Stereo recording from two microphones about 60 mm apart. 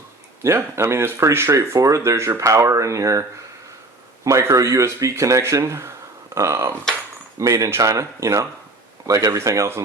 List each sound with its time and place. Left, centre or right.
0.4 s speech: right
1.5 s speech: right
7.9 s speech: right